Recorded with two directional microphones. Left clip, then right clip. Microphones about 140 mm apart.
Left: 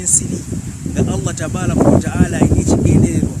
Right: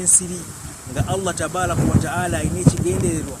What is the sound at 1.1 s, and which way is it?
A man's voice, 5° left (ahead or behind).